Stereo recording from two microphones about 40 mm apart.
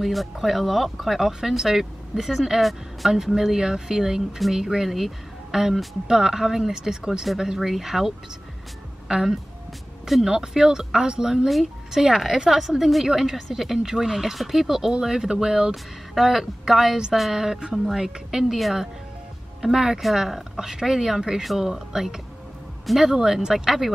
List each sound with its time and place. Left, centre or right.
0.0 s speech: centre
9.1 s speech: centre
11.4 s speech: centre
15.7 s speech: centre